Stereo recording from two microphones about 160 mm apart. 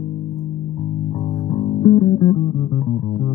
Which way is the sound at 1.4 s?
35° left (ahead or behind).